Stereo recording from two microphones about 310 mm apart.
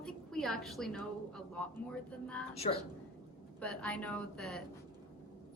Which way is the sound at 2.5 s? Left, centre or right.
Centre.